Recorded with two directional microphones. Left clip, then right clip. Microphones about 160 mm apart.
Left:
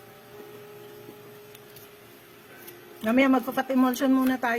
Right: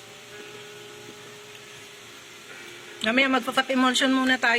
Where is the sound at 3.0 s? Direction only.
15° left (ahead or behind).